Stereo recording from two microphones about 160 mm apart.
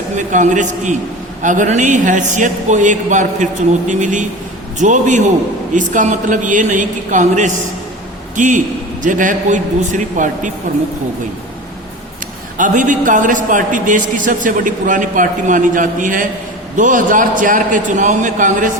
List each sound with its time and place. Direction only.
0.2 s a man's voice: 50° right (ahead or behind)
12.5 s a man's voice: 55° right (ahead or behind)